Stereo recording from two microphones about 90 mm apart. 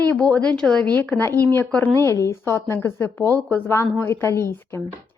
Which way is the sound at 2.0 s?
35° left (ahead or behind).